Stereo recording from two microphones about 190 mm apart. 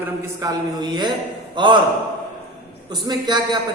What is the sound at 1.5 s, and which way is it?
Speech, 25° right (ahead or behind).